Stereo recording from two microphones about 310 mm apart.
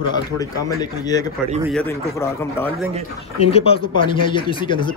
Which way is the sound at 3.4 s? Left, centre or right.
Centre.